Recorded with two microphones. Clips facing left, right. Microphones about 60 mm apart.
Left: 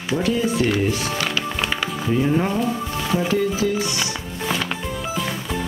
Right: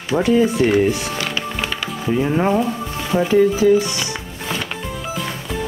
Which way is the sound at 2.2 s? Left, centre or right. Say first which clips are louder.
Right 4 dB; right.